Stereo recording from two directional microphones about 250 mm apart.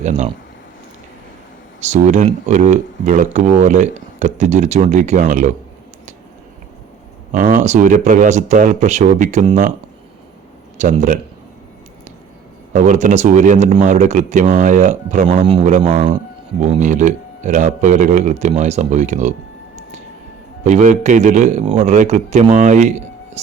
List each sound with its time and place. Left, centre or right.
0.0 s speech: right
1.8 s speech: right
7.3 s speech: right
10.8 s speech: right
12.7 s speech: right
20.7 s speech: right